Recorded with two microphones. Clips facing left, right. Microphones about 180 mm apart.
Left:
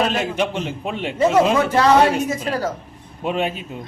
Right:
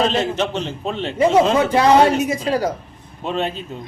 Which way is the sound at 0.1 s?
10° left (ahead or behind).